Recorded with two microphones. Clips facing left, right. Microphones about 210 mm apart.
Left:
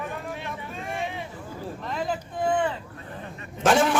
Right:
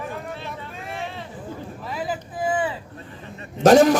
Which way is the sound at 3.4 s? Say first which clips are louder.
Right 8 dB; 40° right (ahead or behind).